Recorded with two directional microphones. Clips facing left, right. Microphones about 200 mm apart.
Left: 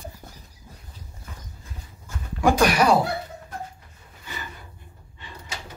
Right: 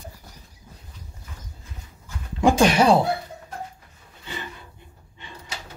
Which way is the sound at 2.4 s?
25° right (ahead or behind).